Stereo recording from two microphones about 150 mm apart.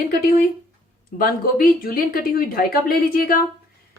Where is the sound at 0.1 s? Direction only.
80° left.